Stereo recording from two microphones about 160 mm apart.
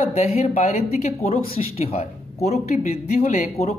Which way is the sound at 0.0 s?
40° left (ahead or behind).